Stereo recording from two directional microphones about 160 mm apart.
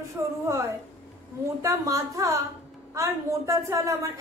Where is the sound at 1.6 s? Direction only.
20° right (ahead or behind).